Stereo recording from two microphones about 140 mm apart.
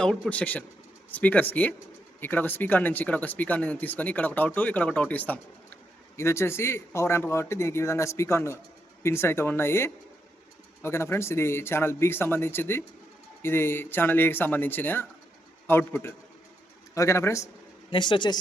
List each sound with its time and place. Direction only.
0.0 s speech: 5° left (ahead or behind)
17.9 s speech: 35° left (ahead or behind)